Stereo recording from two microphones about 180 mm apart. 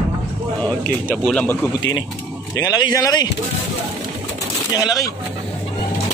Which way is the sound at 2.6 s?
20° left (ahead or behind).